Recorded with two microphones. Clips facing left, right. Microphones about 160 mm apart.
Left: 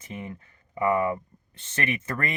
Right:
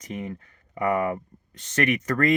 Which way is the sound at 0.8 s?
25° left (ahead or behind).